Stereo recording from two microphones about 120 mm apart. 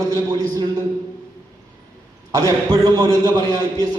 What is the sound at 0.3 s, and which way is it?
Speech, 30° right (ahead or behind).